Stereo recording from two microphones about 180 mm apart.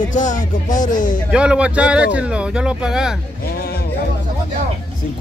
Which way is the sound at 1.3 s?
5° right (ahead or behind).